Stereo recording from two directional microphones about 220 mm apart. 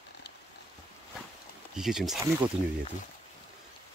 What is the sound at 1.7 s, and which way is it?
Speech, centre (ahead or behind).